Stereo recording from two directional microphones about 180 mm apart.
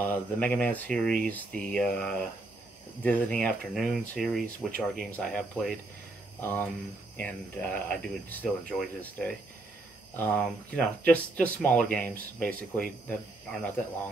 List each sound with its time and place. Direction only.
0.0 s speech: 10° left (ahead or behind)